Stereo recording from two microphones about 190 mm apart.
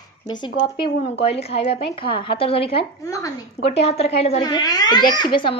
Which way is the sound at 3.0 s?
15° left (ahead or behind).